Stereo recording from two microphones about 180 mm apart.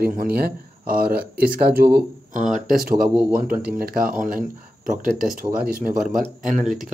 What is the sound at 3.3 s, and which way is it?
Speech, 55° right (ahead or behind).